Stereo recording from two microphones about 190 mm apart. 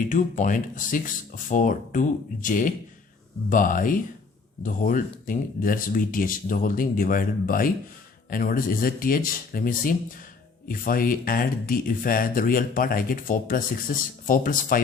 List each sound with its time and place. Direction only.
0.1 s speech: 45° left (ahead or behind)